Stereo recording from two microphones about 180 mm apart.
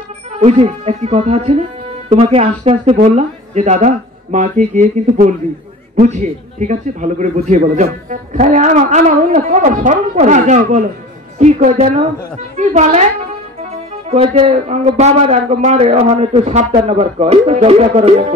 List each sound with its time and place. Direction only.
0.3 s a man's voice: 35° right (ahead or behind)
14.0 s speech: 35° right (ahead or behind)